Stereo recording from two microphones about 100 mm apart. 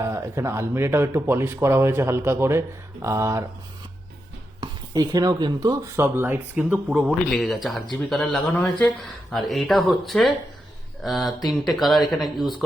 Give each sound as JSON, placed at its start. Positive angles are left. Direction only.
{"t": 0.0, "sound": "speech", "side_deg": -25}
{"t": 4.6, "sound": "speech", "side_deg": -40}
{"t": 6.0, "sound": "speech", "side_deg": -25}
{"t": 7.3, "sound": "speech", "side_deg": 5}
{"t": 7.9, "sound": "speech", "side_deg": 10}